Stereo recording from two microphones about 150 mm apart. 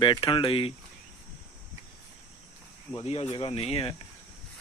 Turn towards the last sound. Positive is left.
turn(degrees=40)  # may be behind; listen again after turning